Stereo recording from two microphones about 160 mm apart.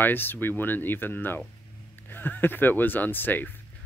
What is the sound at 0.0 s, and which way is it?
Speech, 10° left (ahead or behind).